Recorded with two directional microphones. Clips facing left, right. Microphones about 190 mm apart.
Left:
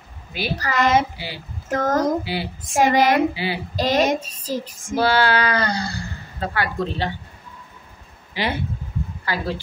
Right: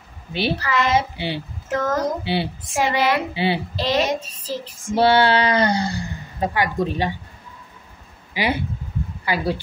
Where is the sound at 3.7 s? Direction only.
45° left (ahead or behind).